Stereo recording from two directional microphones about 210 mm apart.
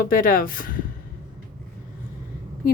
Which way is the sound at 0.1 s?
40° left (ahead or behind).